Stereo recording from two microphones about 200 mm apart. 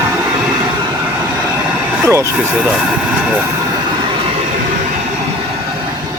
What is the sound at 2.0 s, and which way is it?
Speech, 15° right (ahead or behind).